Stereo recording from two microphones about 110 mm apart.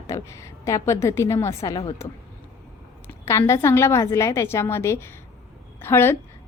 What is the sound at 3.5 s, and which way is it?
A woman's voice, 25° left (ahead or behind).